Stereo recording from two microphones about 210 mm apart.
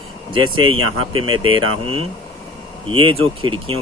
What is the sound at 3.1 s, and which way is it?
Speech, 25° right (ahead or behind).